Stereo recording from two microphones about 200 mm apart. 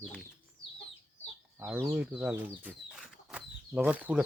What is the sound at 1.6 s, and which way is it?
Speech, 10° right (ahead or behind).